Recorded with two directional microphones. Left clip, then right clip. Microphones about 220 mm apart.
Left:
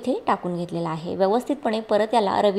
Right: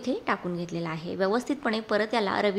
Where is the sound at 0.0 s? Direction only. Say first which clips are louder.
Left 6 dB; 10° left (ahead or behind).